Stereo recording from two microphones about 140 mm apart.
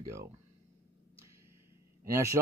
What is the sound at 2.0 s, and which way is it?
Speech, 20° right (ahead or behind).